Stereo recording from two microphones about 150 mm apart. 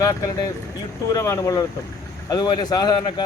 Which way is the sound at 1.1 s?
20° left (ahead or behind).